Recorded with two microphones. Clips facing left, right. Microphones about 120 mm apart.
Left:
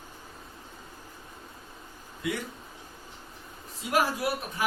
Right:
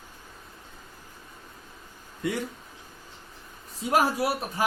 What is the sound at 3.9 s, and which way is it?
Speech, 30° right (ahead or behind).